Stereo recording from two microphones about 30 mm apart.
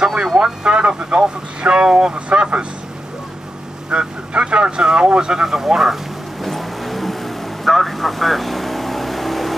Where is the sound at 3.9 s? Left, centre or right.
Right.